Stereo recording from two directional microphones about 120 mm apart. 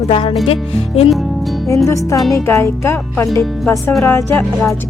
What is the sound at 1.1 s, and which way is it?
Music, centre (ahead or behind).